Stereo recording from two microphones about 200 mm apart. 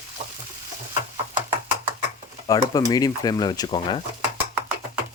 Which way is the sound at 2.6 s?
20° left (ahead or behind).